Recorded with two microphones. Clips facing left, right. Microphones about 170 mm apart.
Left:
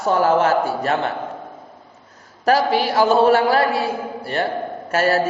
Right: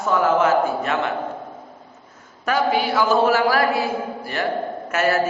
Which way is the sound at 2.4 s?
35° left (ahead or behind).